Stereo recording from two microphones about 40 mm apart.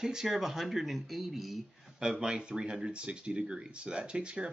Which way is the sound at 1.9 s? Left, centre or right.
Centre.